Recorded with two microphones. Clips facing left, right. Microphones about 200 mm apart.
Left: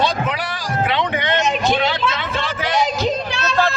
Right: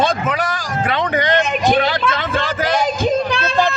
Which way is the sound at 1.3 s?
55° right (ahead or behind).